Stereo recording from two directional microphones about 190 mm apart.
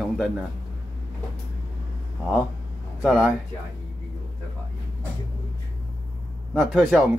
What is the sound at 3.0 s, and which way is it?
Speech, 5° right (ahead or behind).